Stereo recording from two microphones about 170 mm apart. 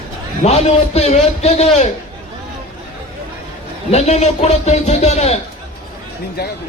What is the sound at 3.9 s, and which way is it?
A man's voice, 40° left (ahead or behind).